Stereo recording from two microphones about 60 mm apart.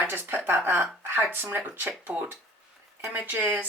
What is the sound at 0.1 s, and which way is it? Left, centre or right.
Speech, right.